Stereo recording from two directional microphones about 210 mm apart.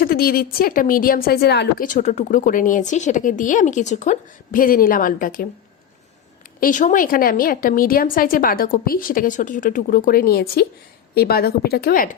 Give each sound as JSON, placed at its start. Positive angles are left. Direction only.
{"t": 0.0, "sound": "a woman's voice", "side_deg": 45}
{"t": 6.6, "sound": "a woman's voice", "side_deg": 40}